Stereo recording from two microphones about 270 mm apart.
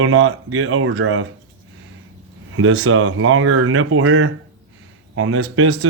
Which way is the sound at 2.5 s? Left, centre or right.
Right.